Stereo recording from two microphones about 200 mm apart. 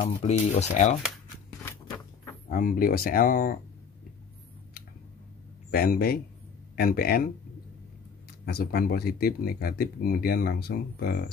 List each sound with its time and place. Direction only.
0.0 s speech: 35° left (ahead or behind)
2.5 s speech: 45° left (ahead or behind)
5.7 s speech: 50° left (ahead or behind)
8.5 s speech: 50° left (ahead or behind)